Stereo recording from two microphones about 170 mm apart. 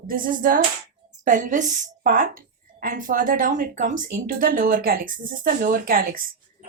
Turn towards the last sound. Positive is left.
turn(degrees=-60)  # may be behind; listen again after turning